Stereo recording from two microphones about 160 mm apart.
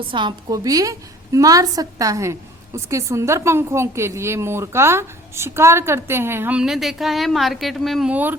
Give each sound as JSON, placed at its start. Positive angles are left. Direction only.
{"t": 0.1, "sound": "a woman's voice", "side_deg": -30}